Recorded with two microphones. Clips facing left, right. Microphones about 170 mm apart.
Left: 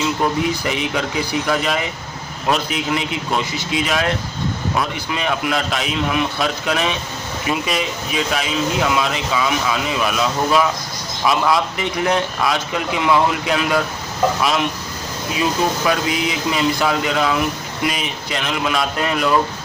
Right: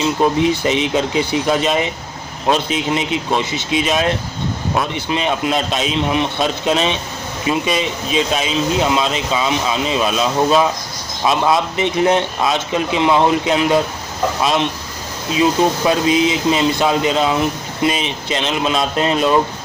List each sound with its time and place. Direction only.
0.0 s speech: 20° right (ahead or behind)